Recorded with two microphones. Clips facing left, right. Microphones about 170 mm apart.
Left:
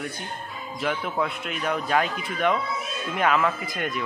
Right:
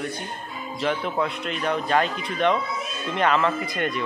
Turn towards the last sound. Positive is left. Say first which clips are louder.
# right 3 dB
turn(degrees=5)  # may be behind; listen again after turning